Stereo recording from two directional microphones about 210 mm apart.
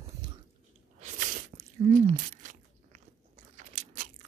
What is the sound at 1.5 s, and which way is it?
Biting, 35° right (ahead or behind).